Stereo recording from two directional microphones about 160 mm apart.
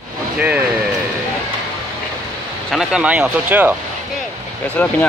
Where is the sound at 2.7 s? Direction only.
5° right (ahead or behind).